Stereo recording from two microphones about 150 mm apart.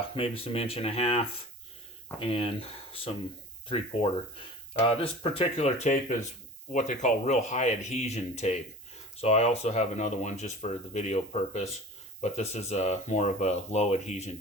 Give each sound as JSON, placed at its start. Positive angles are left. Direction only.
{"t": 0.1, "sound": "speech", "side_deg": 40}